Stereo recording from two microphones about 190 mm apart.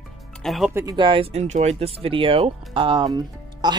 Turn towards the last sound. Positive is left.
turn(degrees=-20)  # may be behind; listen again after turning